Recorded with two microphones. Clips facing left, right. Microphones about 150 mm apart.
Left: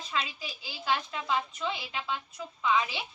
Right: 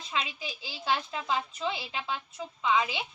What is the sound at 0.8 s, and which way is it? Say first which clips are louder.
A woman's voice: even; 30° right (ahead or behind).